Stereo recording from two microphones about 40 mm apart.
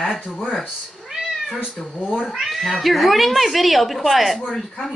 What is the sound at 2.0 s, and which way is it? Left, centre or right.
Speech, centre.